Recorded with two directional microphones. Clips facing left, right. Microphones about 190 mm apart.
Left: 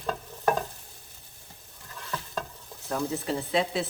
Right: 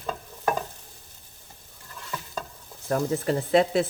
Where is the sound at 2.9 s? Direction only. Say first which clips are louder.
Right 5 dB; 55° right (ahead or behind).